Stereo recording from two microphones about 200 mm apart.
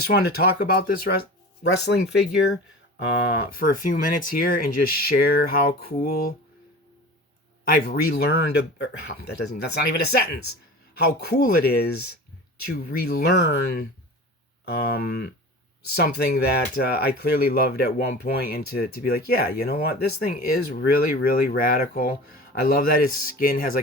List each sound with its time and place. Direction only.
0.1 s speech: 50° left (ahead or behind)
3.3 s speech: 45° left (ahead or behind)
7.6 s speech: 45° left (ahead or behind)